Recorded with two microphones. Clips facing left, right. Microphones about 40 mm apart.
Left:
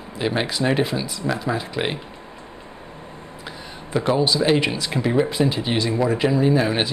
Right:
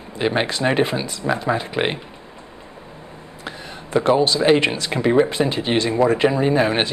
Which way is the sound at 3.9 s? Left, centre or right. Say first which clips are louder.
Right 3 dB; centre.